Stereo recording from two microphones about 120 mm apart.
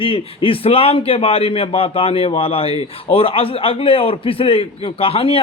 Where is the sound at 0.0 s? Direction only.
50° left (ahead or behind).